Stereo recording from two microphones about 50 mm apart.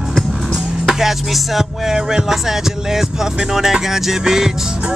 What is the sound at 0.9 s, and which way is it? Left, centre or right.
Music, centre.